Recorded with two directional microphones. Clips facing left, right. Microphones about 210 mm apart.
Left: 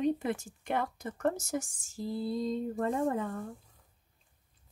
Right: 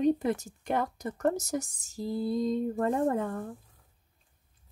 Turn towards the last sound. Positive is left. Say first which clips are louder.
# right 3 dB
turn(degrees=-50)  # may be behind; listen again after turning